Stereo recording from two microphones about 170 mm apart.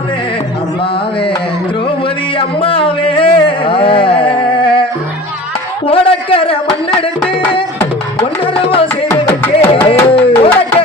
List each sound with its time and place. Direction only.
2.4 s a sound: 35° left (ahead or behind)
8.2 s music: 35° left (ahead or behind)
9.0 s music: 15° left (ahead or behind)
9.8 s music: 35° left (ahead or behind)